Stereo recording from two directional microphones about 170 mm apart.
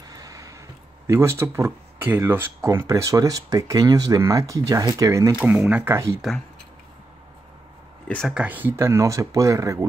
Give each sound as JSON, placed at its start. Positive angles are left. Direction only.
{"t": 0.0, "sound": "speech", "side_deg": -20}
{"t": 5.4, "sound": "speech", "side_deg": -5}
{"t": 8.1, "sound": "speech", "side_deg": 0}